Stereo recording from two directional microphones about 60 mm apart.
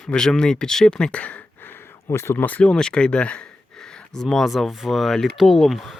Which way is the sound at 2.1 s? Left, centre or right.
Left.